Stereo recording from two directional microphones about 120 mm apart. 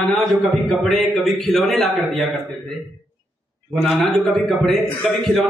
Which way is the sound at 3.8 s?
Centre (ahead or behind).